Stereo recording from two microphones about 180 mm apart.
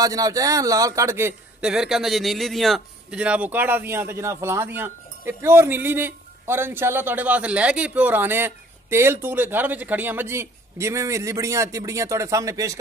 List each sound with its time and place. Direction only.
0.0 s a man's voice: 20° right (ahead or behind)
1.7 s a man's voice: 5° right (ahead or behind)